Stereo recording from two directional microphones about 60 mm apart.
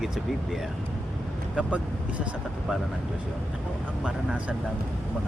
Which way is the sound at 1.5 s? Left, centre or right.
Right.